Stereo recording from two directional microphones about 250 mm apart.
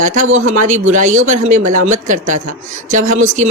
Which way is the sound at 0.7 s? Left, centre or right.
Right.